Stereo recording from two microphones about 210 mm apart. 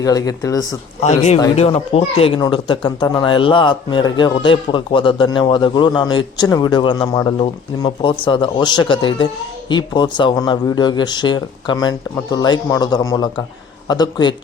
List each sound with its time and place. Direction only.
0.0 s speech: 15° left (ahead or behind)
1.0 s a man's voice: 30° left (ahead or behind)